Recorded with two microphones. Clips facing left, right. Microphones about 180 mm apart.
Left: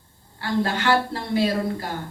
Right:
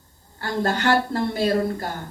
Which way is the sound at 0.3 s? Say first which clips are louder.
Even; 45° right (ahead or behind).